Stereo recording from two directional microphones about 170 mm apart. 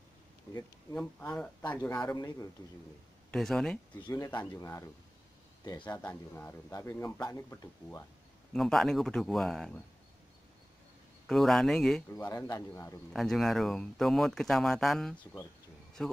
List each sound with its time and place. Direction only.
0.5 s speech: 15° left (ahead or behind)
2.0 s speech: 20° left (ahead or behind)
3.3 s speech: 5° left (ahead or behind)
4.0 s speech: 25° left (ahead or behind)
5.9 s speech: 10° left (ahead or behind)
8.5 s speech: centre (ahead or behind)
11.2 s speech: centre (ahead or behind)
12.3 s speech: 20° left (ahead or behind)
13.1 s speech: centre (ahead or behind)